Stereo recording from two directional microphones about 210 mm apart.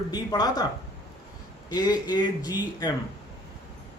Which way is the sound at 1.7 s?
20° left (ahead or behind).